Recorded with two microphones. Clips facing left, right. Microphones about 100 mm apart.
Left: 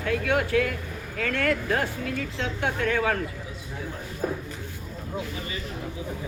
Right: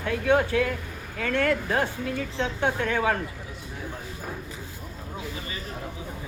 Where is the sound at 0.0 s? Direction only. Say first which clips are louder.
Right 2 dB; 25° right (ahead or behind).